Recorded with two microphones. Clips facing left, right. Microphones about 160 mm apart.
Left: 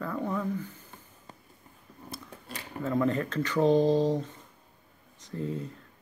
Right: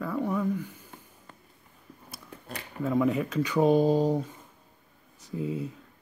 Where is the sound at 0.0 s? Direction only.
5° right (ahead or behind).